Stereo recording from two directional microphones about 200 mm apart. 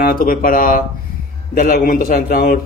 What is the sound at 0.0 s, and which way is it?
Speech, 45° left (ahead or behind).